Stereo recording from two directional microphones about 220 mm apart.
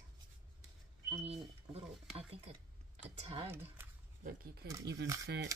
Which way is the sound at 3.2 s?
25° right (ahead or behind).